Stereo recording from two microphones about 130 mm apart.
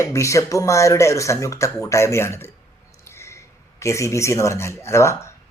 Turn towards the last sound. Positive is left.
turn(degrees=20)  # may be behind; listen again after turning